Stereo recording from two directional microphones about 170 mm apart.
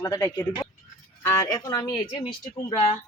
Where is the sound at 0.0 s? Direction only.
20° left (ahead or behind).